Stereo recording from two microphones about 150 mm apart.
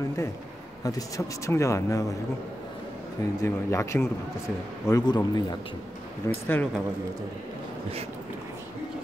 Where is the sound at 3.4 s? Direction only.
20° left (ahead or behind).